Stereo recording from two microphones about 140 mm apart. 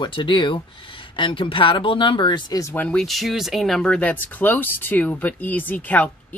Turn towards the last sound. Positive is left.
turn(degrees=10)  # may be behind; listen again after turning